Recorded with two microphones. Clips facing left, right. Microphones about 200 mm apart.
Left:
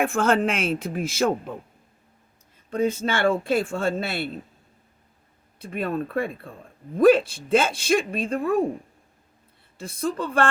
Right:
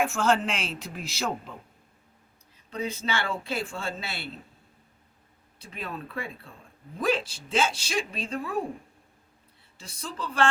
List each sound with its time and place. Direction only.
0.0 s speech: 55° left (ahead or behind)
2.6 s speech: 50° left (ahead or behind)
5.5 s speech: 55° left (ahead or behind)
9.7 s speech: 55° left (ahead or behind)